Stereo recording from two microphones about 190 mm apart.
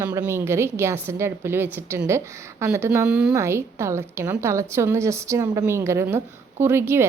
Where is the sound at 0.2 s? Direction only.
15° right (ahead or behind).